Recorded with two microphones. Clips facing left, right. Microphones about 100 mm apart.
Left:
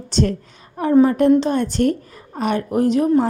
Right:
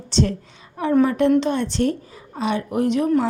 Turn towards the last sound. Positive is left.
turn(degrees=40)  # may be behind; listen again after turning